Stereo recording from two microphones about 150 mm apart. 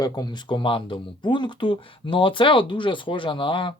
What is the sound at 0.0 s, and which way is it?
Speech, 25° left (ahead or behind).